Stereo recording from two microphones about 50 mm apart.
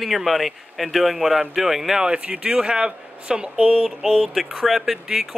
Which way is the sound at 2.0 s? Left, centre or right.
Centre.